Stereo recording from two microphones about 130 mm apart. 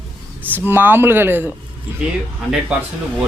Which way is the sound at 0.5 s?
15° right (ahead or behind).